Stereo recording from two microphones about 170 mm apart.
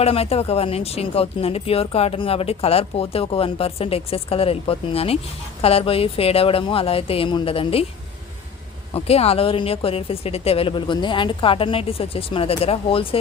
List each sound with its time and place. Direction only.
0.0 s speech: 35° left (ahead or behind)
8.9 s speech: 35° left (ahead or behind)